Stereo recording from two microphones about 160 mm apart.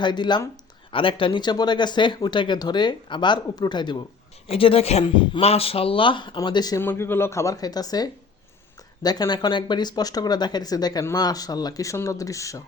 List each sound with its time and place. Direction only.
0.0 s speech: 30° left (ahead or behind)